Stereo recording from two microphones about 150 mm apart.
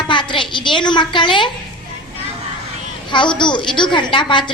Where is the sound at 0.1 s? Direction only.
30° left (ahead or behind).